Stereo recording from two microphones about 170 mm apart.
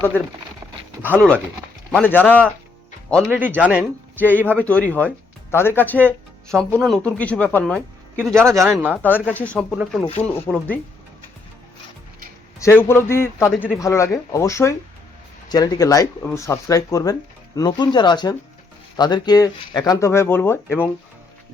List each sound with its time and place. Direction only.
1.0 s speech: 10° left (ahead or behind)
3.3 s speech: 10° right (ahead or behind)
4.2 s speech: 10° left (ahead or behind)
8.3 s speech: 15° right (ahead or behind)
9.0 s speech: 10° left (ahead or behind)
12.5 s speech: 15° left (ahead or behind)